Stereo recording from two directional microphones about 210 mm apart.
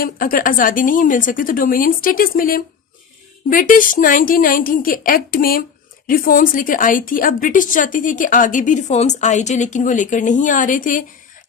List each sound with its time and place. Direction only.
0.0 s speech: 45° left (ahead or behind)